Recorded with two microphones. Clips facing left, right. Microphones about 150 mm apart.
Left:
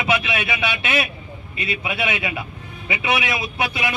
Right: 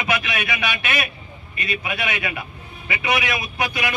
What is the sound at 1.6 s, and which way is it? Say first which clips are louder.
A man's voice: left 1 dB; 20° left (ahead or behind).